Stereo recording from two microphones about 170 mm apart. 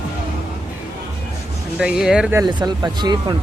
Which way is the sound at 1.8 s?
5° right (ahead or behind).